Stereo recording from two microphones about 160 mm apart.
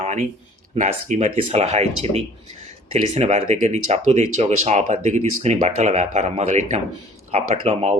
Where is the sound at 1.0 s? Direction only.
50° right (ahead or behind).